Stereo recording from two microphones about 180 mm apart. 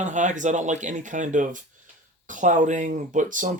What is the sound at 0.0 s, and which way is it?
Speech, 40° right (ahead or behind).